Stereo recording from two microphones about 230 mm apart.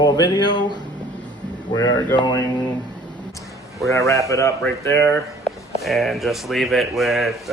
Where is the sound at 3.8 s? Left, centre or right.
Centre.